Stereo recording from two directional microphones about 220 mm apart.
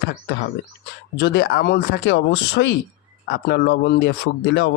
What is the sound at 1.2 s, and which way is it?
Speech, 50° left (ahead or behind).